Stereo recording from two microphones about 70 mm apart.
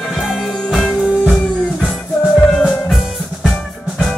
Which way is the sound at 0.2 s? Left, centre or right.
Centre.